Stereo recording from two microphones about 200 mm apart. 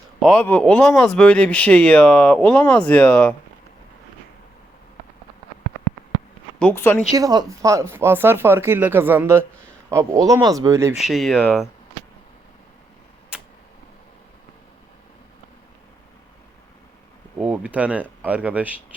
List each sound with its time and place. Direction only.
0.2 s speech: 5° left (ahead or behind)
6.6 s speech: 10° left (ahead or behind)
7.2 s speech: 20° right (ahead or behind)
10.9 s speech: centre (ahead or behind)
13.3 s tick-tock: 5° right (ahead or behind)
17.4 s speech: 5° right (ahead or behind)